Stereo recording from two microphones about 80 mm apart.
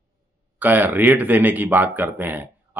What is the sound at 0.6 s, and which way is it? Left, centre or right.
Speech, right.